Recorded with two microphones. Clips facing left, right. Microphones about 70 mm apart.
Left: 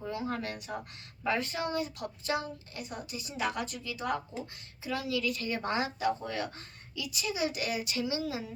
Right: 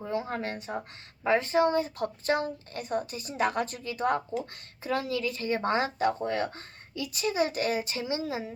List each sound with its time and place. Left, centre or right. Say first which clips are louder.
0.0 s a woman's voice: right 3 dB; right